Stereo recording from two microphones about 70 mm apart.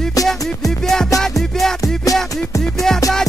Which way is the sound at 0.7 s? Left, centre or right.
Centre.